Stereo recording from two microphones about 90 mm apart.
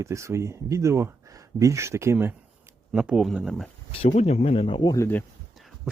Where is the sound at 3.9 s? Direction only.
90° left.